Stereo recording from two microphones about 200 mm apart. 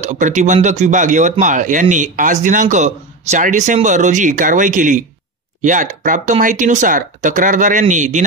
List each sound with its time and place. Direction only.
0.0 s speech: 35° right (ahead or behind)